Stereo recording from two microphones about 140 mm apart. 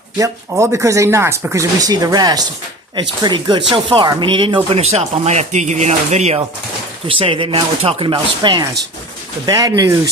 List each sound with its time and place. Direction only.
0.2 s speech: 20° right (ahead or behind); by 6.4 s 50° right (ahead or behind)
7.1 s speech: 40° right (ahead or behind)